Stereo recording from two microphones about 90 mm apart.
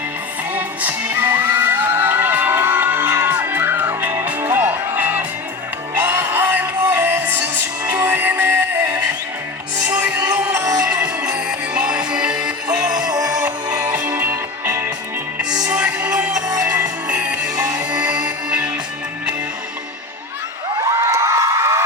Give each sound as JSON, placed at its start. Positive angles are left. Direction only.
{"t": 0.5, "sound": "music", "side_deg": -20}
{"t": 13.9, "sound": "music", "side_deg": -15}
{"t": 15.6, "sound": "music", "side_deg": -15}
{"t": 21.1, "sound": "a sound", "side_deg": -30}